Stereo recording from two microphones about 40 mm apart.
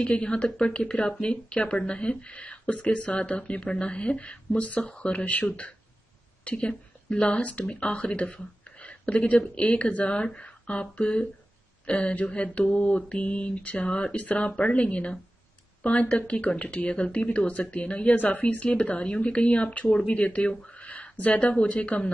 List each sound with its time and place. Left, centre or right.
0.0 s speech: left
18.1 s speech: left